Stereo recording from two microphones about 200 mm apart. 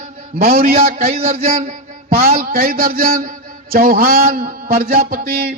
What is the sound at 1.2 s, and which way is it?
Speech, 30° right (ahead or behind).